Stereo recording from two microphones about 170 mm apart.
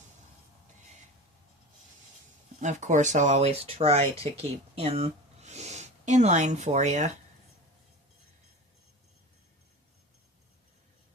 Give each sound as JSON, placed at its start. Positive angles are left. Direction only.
{"t": 2.6, "sound": "speech", "side_deg": -45}